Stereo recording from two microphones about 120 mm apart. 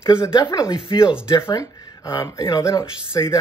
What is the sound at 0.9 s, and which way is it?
Speech, 40° left (ahead or behind).